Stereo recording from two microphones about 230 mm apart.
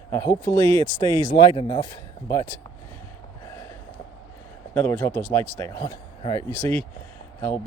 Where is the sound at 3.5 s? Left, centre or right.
Centre.